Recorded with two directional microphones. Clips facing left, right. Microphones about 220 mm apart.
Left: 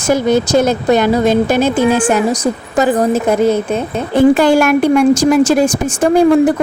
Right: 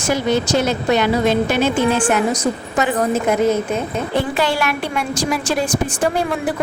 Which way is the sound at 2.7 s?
35° left (ahead or behind).